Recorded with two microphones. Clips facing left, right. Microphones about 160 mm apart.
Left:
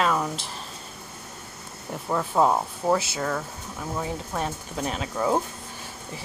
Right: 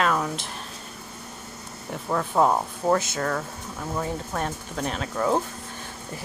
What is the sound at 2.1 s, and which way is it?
Speech, 5° left (ahead or behind).